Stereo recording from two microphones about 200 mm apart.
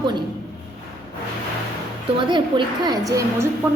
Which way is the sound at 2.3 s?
25° right (ahead or behind).